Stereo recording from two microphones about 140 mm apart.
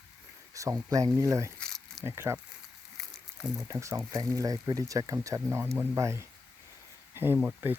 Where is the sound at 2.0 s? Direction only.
20° right (ahead or behind).